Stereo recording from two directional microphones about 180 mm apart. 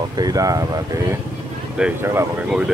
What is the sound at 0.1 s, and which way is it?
Speech, 20° right (ahead or behind).